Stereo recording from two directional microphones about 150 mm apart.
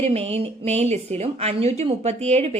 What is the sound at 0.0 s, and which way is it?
Speech, 45° right (ahead or behind).